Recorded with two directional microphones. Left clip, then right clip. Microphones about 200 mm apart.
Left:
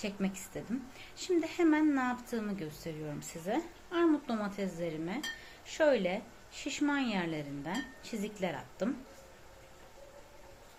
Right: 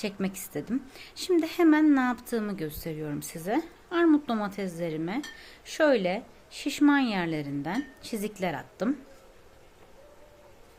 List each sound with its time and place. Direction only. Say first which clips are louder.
0.0 s a woman's voice: right 5 dB; 55° right (ahead or behind)